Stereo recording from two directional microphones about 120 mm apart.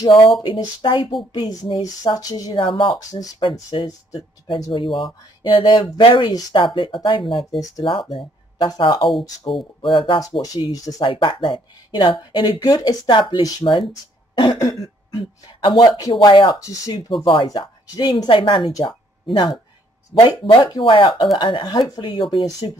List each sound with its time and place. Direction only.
0.4 s speech: 45° left (ahead or behind)
1.5 s speech: 30° left (ahead or behind)
2.6 s speech: 45° left (ahead or behind)
3.0 s speech: 30° left (ahead or behind)
3.7 s speech: 45° left (ahead or behind)
10.7 s speech: 30° left (ahead or behind)
11.1 s speech: 45° left (ahead or behind)
14.3 s cough: 40° left (ahead or behind)
15.6 s speech: 40° left (ahead or behind)
16.5 s speech: 30° left (ahead or behind)
16.9 s speech: 40° left (ahead or behind)
18.7 s speech: 30° left (ahead or behind)
19.2 s speech: 45° left (ahead or behind)